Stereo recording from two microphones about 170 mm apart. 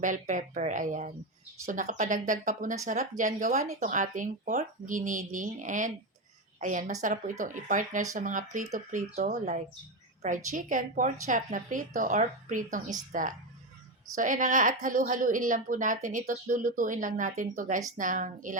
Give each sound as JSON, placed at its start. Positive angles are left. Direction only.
{"t": 0.0, "sound": "a woman's voice", "side_deg": -50}